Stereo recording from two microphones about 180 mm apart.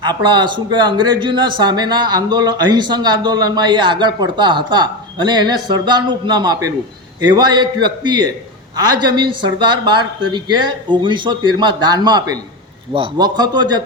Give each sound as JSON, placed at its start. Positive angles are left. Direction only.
{"t": 0.0, "sound": "speech", "side_deg": -25}